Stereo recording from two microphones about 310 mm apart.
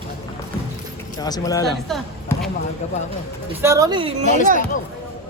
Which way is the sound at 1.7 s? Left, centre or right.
Centre.